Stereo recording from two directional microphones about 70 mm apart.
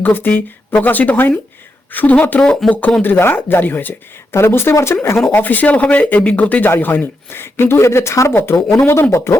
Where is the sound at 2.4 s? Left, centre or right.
Centre.